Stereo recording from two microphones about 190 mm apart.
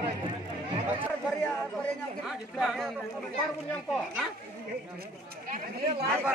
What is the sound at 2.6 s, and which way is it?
Speech, centre (ahead or behind).